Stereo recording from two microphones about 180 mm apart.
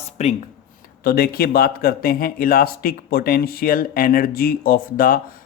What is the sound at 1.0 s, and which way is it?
Speech, 55° left (ahead or behind).